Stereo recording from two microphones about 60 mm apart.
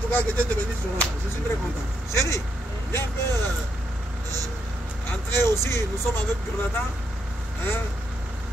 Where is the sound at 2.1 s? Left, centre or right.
Left.